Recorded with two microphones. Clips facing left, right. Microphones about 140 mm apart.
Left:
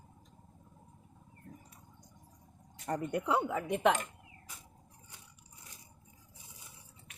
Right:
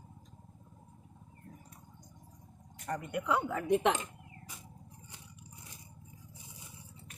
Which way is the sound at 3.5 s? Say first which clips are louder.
Right 4 dB; 5° left (ahead or behind).